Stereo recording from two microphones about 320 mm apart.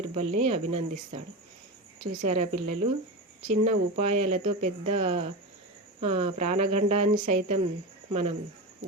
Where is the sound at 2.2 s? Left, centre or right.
Right.